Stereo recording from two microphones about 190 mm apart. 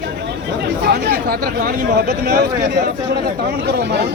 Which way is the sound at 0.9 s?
55° right (ahead or behind).